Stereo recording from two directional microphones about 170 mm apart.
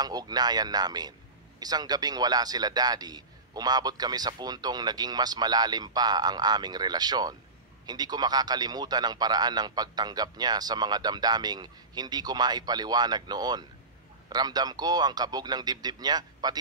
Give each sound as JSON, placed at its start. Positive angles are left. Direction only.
{"t": 0.0, "sound": "a man's voice", "side_deg": -25}